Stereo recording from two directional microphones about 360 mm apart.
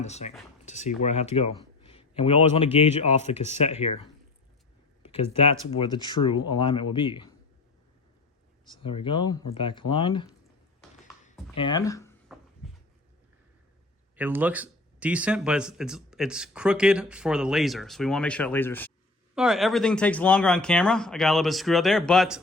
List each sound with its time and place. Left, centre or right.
0.0 s speech: centre
5.0 s speech: centre
8.7 s speech: centre
11.5 s speech: centre
12.6 s a sound: centre
14.2 s speech: centre